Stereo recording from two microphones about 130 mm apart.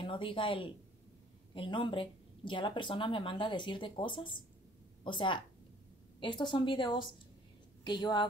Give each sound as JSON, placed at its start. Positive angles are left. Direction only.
{"t": 0.0, "sound": "speech", "side_deg": 40}